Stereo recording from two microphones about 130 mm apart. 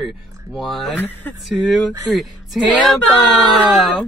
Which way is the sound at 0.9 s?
15° left (ahead or behind).